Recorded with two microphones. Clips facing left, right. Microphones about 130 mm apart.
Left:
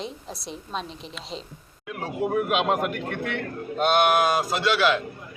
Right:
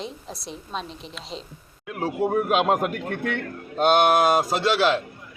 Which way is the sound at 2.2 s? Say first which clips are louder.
Right 2 dB; 35° right (ahead or behind).